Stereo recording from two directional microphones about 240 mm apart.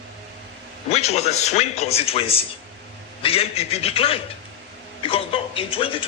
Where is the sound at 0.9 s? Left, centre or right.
Left.